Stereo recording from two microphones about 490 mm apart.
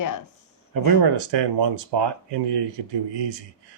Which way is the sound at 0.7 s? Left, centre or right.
Right.